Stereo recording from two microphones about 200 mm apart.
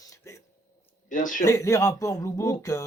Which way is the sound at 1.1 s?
40° left (ahead or behind).